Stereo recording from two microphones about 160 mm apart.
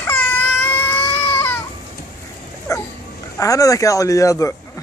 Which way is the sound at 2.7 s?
20° left (ahead or behind).